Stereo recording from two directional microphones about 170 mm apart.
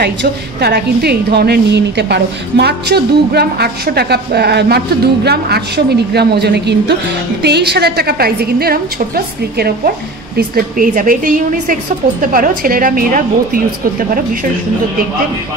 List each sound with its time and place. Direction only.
0.0 s a woman's voice: 70° right (ahead or behind); by 13.6 s 55° right (ahead or behind)